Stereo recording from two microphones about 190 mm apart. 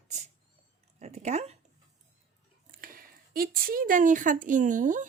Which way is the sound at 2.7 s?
50° right (ahead or behind).